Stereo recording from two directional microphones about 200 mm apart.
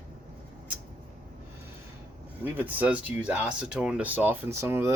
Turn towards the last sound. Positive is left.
turn(degrees=-15)  # may be behind; listen again after turning